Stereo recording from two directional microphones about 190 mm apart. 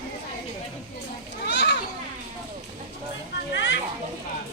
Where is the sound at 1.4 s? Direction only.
65° left (ahead or behind).